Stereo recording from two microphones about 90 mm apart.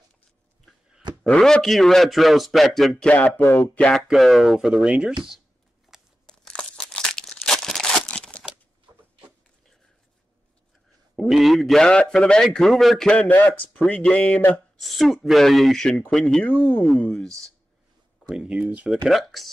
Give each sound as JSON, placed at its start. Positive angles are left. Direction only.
{"t": 1.2, "sound": "a man's voice", "side_deg": 5}
{"t": 4.1, "sound": "a man's voice", "side_deg": 0}
{"t": 5.9, "sound": "crunch", "side_deg": -5}
{"t": 6.2, "sound": "crumpling", "side_deg": 10}
{"t": 11.1, "sound": "a man's voice", "side_deg": 0}
{"t": 13.1, "sound": "speech", "side_deg": 15}
{"t": 14.8, "sound": "a man's voice", "side_deg": 0}
{"t": 16.4, "sound": "speech", "side_deg": 20}
{"t": 16.9, "sound": "speech", "side_deg": 10}
{"t": 18.3, "sound": "speech", "side_deg": -10}
{"t": 19.0, "sound": "a man's voice", "side_deg": 0}